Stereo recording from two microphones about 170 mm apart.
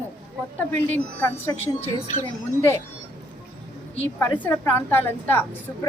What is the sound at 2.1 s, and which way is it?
Speech, 50° left (ahead or behind).